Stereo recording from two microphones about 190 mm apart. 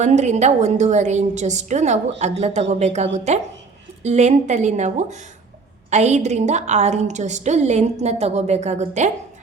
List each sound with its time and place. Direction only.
0.0 s a woman's voice: 35° right (ahead or behind)